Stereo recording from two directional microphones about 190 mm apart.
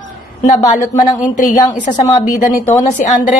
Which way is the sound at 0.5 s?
20° left (ahead or behind).